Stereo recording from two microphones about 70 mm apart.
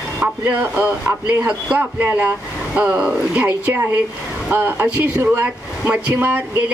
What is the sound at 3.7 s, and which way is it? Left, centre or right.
Speech, right.